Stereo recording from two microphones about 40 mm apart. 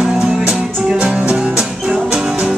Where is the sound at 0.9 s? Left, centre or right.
Right.